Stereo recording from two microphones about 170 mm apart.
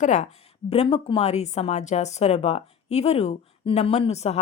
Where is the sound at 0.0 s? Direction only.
45° left (ahead or behind).